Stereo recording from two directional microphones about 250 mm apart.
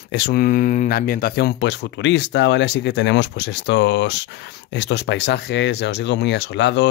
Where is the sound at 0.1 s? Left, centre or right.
Left.